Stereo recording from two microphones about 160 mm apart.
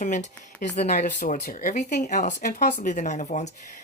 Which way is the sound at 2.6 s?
75° left (ahead or behind).